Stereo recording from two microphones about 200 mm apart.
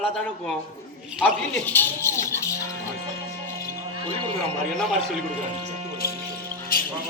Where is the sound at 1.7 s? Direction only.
10° left (ahead or behind).